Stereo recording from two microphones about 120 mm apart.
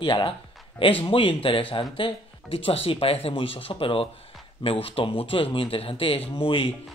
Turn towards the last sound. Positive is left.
turn(degrees=45)  # may be behind; listen again after turning